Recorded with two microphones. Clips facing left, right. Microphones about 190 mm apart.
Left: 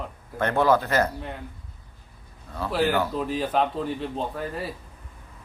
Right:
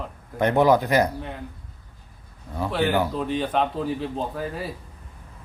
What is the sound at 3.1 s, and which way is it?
Speech, centre (ahead or behind).